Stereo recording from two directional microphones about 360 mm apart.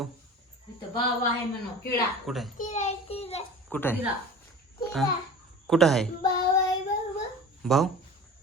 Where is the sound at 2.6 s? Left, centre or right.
Centre.